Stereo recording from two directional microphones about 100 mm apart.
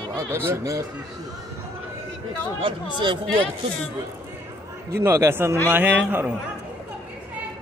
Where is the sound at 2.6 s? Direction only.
55° right (ahead or behind).